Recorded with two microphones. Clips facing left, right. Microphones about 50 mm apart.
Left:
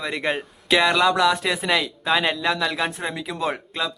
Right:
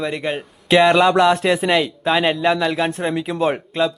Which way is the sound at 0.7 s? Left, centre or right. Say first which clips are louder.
Right 5 dB; right.